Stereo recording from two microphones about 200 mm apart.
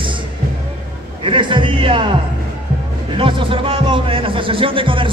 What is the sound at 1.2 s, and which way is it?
Speech, 25° right (ahead or behind).